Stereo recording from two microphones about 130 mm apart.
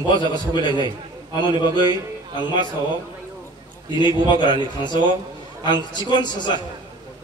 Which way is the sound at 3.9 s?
35° left (ahead or behind).